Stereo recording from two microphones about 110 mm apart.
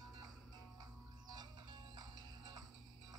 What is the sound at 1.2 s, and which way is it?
Music, 40° right (ahead or behind).